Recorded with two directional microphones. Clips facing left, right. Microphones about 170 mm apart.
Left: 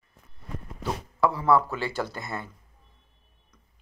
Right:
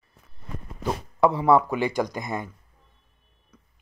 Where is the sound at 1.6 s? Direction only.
15° right (ahead or behind).